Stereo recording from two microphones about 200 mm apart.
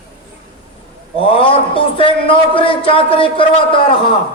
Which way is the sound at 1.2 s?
25° left (ahead or behind).